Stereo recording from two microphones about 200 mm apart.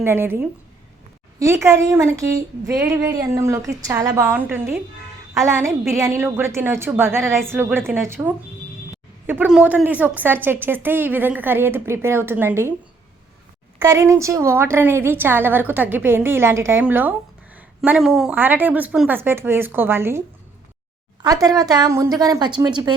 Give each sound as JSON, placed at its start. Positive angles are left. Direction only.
{"t": 0.0, "sound": "a woman's voice", "side_deg": -10}
{"t": 5.9, "sound": "a woman's voice", "side_deg": -15}
{"t": 13.8, "sound": "a woman's voice", "side_deg": -15}